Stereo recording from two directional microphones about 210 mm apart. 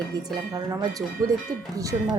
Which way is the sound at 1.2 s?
15° right (ahead or behind).